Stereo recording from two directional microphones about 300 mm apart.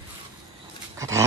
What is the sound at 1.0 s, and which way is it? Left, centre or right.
Dog, centre.